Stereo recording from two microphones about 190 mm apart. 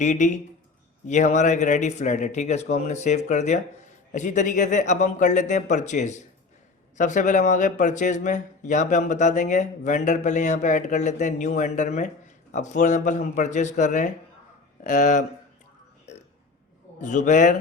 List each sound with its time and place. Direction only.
0.0 s speech: 40° left (ahead or behind)
17.0 s speech: 40° left (ahead or behind)